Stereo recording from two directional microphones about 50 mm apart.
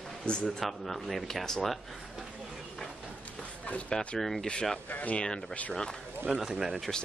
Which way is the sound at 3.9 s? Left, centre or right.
Centre.